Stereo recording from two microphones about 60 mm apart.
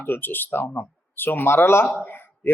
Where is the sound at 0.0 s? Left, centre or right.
Left.